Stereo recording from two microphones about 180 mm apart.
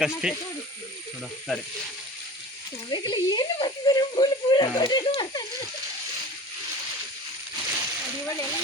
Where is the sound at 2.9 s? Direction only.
25° left (ahead or behind).